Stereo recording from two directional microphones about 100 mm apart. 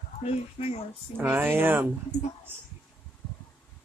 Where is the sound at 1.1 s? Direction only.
20° right (ahead or behind).